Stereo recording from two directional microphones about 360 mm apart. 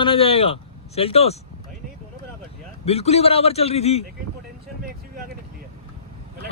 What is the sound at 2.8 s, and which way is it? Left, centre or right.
Speech, centre.